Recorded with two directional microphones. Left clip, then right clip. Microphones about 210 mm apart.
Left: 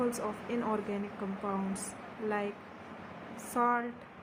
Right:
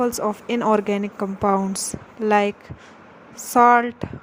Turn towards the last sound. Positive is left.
turn(degrees=-50)  # may be behind; listen again after turning